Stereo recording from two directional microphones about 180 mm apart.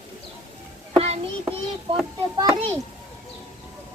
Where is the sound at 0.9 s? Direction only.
35° right (ahead or behind).